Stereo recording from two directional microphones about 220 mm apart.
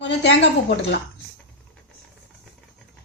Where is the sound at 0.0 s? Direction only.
50° left (ahead or behind).